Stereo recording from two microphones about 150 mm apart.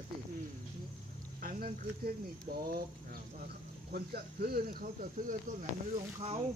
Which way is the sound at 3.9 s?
90° right.